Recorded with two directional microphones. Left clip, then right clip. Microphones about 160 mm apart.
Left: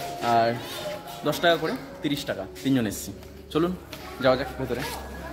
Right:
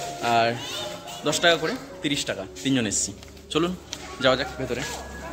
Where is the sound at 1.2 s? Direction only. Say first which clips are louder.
Right 2 dB; 5° left (ahead or behind).